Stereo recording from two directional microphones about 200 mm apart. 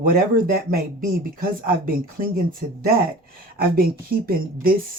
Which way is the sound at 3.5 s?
50° right (ahead or behind).